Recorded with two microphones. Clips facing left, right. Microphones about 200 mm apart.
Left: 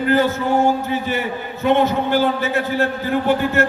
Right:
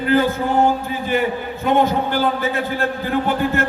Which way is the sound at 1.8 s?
50° right (ahead or behind).